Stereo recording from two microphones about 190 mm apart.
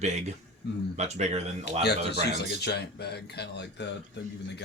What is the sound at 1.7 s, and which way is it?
Speech, 60° left (ahead or behind).